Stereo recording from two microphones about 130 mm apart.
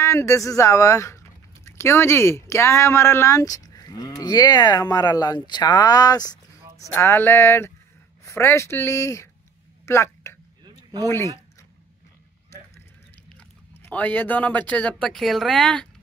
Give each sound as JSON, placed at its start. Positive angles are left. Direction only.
{"t": 0.0, "sound": "speech", "side_deg": 20}
{"t": 7.0, "sound": "music", "side_deg": 20}
{"t": 8.3, "sound": "speech", "side_deg": 20}
{"t": 9.8, "sound": "a sound", "side_deg": 20}
{"t": 13.3, "sound": "speech", "side_deg": 10}